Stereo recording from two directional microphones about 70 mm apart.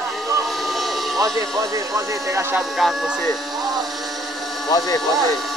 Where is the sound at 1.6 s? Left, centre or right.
Right.